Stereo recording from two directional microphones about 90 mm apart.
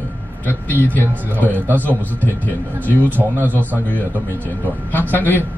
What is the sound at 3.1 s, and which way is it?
Speech, 20° right (ahead or behind).